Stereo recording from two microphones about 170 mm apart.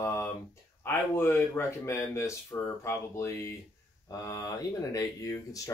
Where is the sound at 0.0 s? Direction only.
15° left (ahead or behind).